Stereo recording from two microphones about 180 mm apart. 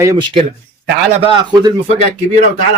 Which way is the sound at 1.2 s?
30° right (ahead or behind).